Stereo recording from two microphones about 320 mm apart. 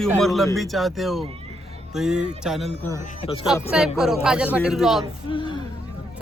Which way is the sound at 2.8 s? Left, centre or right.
Centre.